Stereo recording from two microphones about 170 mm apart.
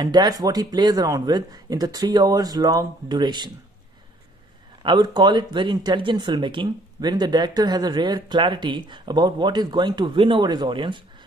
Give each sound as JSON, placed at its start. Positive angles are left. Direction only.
{"t": 0.0, "sound": "speech", "side_deg": -25}
{"t": 4.8, "sound": "speech", "side_deg": -25}